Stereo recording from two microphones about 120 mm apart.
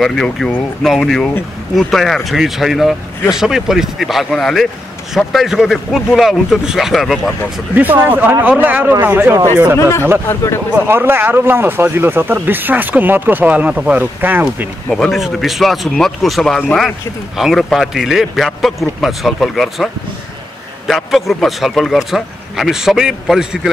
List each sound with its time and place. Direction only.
0.0 s a man's voice: centre (ahead or behind)
7.7 s speech: 15° right (ahead or behind)
9.8 s speech: 20° left (ahead or behind)
10.7 s speech: 15° right (ahead or behind)
14.9 s a man's voice: centre (ahead or behind)